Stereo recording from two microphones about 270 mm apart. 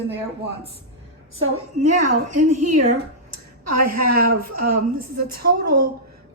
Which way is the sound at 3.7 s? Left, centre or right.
Right.